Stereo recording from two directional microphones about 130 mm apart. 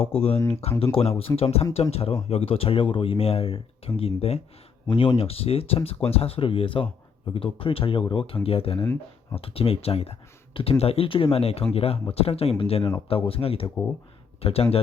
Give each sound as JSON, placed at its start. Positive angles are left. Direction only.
{"t": 0.0, "sound": "speech", "side_deg": 45}